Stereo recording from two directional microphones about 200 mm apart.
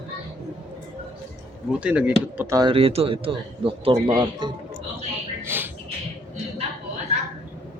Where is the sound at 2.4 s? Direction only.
15° right (ahead or behind).